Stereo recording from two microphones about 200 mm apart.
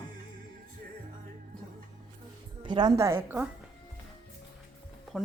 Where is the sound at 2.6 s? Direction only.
20° right (ahead or behind).